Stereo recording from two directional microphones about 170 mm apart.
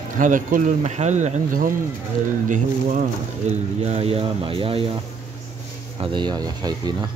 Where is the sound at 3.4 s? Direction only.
40° right (ahead or behind).